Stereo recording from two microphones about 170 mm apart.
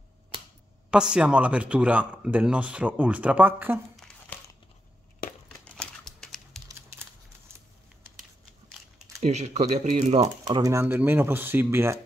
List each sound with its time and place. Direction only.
0.8 s speech: 5° right (ahead or behind)
3.9 s crumpling: 5° left (ahead or behind)
5.7 s typewriter: 5° left (ahead or behind)
8.2 s a sound: centre (ahead or behind)
9.2 s speech: 40° right (ahead or behind)
10.4 s speech: 20° right (ahead or behind)